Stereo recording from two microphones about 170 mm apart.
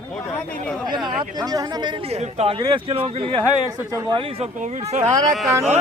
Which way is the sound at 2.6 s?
30° right (ahead or behind).